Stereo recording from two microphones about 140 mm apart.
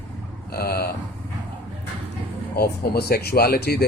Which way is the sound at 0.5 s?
90° left.